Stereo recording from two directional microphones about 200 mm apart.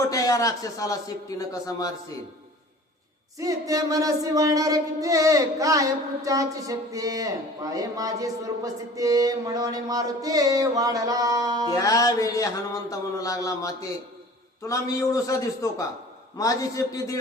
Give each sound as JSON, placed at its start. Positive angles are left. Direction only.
{"t": 0.1, "sound": "speech", "side_deg": 15}
{"t": 3.3, "sound": "chant", "side_deg": -15}
{"t": 11.7, "sound": "speech", "side_deg": 15}